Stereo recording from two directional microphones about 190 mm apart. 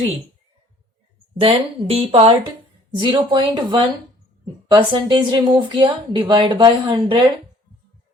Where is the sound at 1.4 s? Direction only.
30° right (ahead or behind).